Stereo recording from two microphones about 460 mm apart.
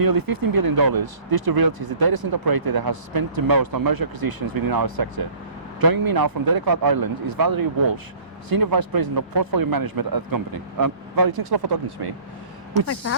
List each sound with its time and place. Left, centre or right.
0.0 s speech: right